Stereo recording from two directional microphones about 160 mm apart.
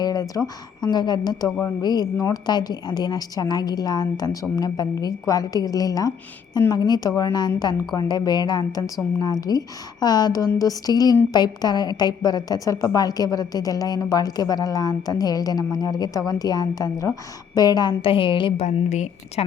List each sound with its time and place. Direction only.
0.0 s a woman's voice: 25° left (ahead or behind)
18.6 s a woman's voice: 45° left (ahead or behind)